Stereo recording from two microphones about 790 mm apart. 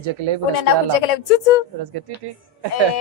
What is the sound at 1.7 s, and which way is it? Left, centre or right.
Music, right.